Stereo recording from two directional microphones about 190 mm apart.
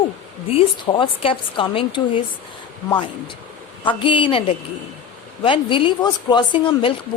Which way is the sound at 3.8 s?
25° left (ahead or behind).